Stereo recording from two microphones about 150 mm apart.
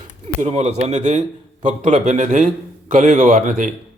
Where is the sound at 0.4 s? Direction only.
45° right (ahead or behind).